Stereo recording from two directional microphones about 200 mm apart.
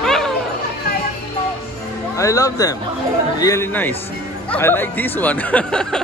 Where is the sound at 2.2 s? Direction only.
15° left (ahead or behind).